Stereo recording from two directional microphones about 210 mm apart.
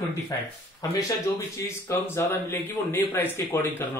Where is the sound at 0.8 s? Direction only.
15° left (ahead or behind).